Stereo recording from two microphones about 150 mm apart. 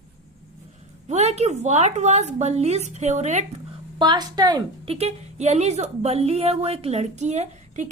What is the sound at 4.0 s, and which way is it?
Speech, 30° right (ahead or behind).